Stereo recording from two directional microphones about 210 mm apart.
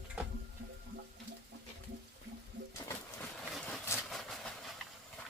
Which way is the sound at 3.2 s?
5° left (ahead or behind).